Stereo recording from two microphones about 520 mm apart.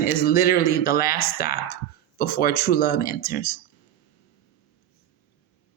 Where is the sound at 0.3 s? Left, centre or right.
Centre.